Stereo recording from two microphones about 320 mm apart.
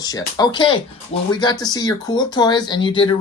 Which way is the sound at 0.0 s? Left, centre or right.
Centre.